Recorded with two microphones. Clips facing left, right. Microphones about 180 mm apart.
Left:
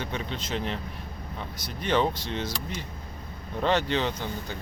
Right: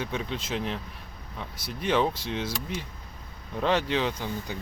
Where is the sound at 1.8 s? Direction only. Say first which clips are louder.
Even; 5° right (ahead or behind).